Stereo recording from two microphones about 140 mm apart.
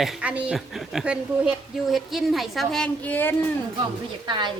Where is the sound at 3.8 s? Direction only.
35° right (ahead or behind).